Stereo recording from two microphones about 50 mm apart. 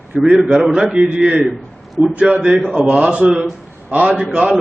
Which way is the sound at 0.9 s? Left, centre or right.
Centre.